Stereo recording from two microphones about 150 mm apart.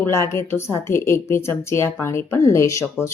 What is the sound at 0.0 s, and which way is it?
Speech, 20° left (ahead or behind).